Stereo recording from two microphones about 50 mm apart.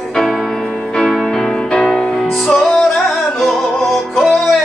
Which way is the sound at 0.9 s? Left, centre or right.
Centre.